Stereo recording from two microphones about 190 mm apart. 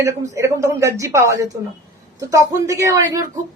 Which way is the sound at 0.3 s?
15° right (ahead or behind).